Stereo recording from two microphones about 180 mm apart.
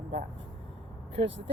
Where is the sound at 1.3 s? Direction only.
90° right.